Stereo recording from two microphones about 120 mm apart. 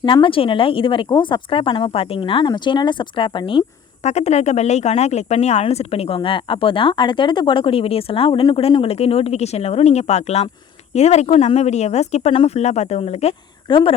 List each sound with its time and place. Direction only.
0.0 s speech: 45° left (ahead or behind)
4.0 s speech: 65° left (ahead or behind)
13.7 s speech: 45° left (ahead or behind)